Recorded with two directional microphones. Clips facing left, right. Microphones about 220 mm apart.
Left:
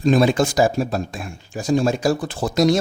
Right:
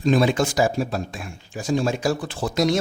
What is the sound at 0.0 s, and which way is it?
Speech, 45° left (ahead or behind).